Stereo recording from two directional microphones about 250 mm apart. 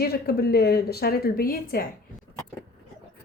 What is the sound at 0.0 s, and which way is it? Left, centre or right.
A woman's voice, left.